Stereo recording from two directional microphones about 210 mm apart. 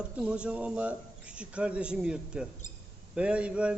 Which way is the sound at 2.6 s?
35° left (ahead or behind).